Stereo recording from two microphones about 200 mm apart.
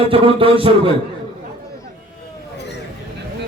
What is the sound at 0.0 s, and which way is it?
Speech, 25° right (ahead or behind).